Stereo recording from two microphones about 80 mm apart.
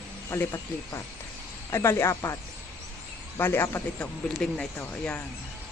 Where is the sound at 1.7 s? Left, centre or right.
Left.